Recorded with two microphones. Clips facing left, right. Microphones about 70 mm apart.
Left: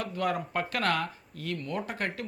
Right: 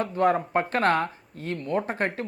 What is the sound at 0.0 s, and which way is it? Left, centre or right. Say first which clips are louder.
Speech: right 8 dB; right.